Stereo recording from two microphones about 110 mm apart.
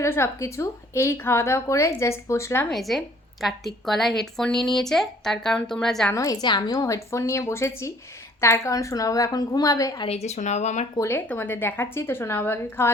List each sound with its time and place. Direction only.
0.0 s a woman's voice: 25° left (ahead or behind)
2.6 s a woman's voice: centre (ahead or behind)
6.1 s a woman's voice: 35° left (ahead or behind)
10.1 s speech: 80° left
10.9 s a woman's voice: 25° left (ahead or behind)